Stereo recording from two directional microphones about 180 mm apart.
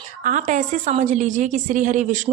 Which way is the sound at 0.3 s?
45° right (ahead or behind).